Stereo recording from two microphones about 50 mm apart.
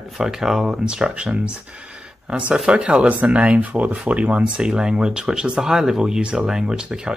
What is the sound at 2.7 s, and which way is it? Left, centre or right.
Speech, right.